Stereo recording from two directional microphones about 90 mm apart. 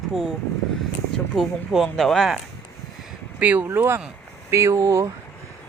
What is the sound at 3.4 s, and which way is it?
Speech, 15° right (ahead or behind).